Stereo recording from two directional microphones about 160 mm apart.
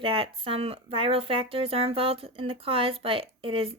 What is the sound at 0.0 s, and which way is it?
Speech, 35° right (ahead or behind).